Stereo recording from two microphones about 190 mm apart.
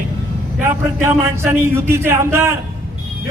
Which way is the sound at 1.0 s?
15° right (ahead or behind).